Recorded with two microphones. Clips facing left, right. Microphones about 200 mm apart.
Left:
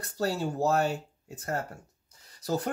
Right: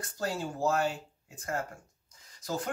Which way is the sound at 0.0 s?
40° left (ahead or behind).